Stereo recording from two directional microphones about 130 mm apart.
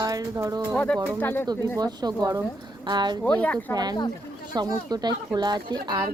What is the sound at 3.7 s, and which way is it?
Speech, 30° right (ahead or behind).